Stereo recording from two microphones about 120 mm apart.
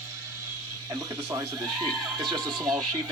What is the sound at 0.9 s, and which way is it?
Speech, 30° right (ahead or behind).